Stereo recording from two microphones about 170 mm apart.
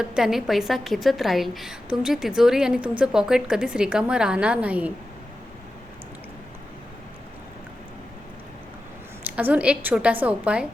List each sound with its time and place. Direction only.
0.0 s a woman's voice: 5° right (ahead or behind)
9.2 s a woman's voice: 10° right (ahead or behind)